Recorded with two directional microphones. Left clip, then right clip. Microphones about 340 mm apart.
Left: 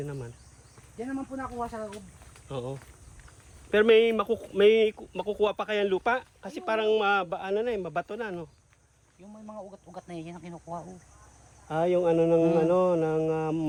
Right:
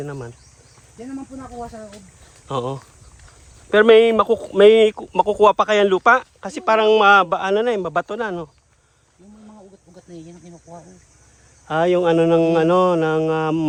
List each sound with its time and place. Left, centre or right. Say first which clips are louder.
0.0 s speech: right 7 dB; centre
2.5 s speech: right 12 dB; centre
11.7 s speech: right 8 dB; right